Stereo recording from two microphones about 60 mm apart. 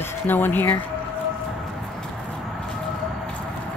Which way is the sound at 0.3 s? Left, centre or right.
Left.